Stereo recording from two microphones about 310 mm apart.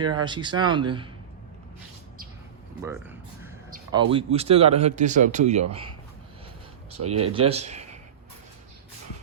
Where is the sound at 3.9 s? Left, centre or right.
Centre.